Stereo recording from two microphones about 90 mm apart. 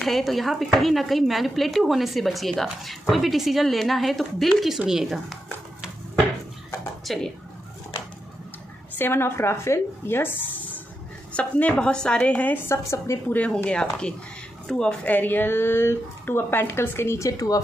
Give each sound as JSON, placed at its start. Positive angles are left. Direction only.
{"t": 0.0, "sound": "speech", "side_deg": 0}
{"t": 7.1, "sound": "speech", "side_deg": 5}
{"t": 8.9, "sound": "a woman's voice", "side_deg": 25}
{"t": 13.3, "sound": "a woman's voice", "side_deg": 20}
{"t": 15.0, "sound": "speech", "side_deg": 20}